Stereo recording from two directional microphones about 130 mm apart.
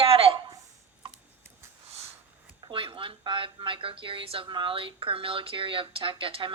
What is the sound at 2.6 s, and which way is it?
A woman's voice, 40° right (ahead or behind).